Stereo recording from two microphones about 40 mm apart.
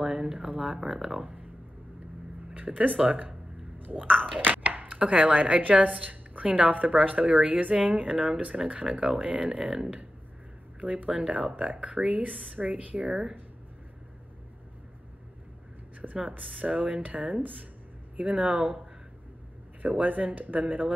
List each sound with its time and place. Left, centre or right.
0.0 s a sound: centre
0.7 s speech: centre
2.5 s speech: right
10.8 s speech: right
16.0 s speech: right
19.8 s speech: right